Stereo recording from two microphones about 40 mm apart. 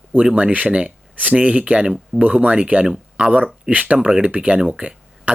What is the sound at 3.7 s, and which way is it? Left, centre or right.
Speech, right.